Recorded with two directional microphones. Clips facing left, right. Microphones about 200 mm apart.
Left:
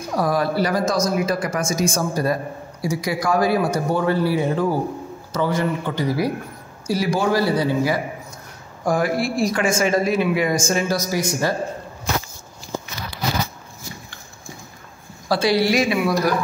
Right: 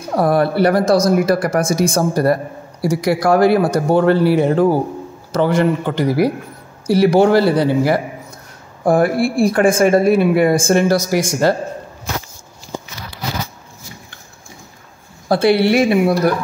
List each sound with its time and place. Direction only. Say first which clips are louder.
0.1 s speech: right 6 dB; 60° right (ahead or behind); by 11.5 s 80° right
15.2 s speech: right 5 dB; 60° right (ahead or behind)